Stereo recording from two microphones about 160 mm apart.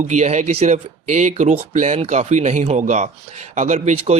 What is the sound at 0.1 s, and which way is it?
Speech, 50° right (ahead or behind).